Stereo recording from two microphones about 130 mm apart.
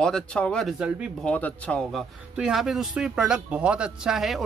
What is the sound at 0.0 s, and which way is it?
A man's voice, 5° left (ahead or behind).